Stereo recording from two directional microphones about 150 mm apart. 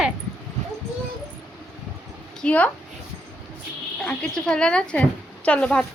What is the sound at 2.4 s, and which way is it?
Speech, 10° left (ahead or behind).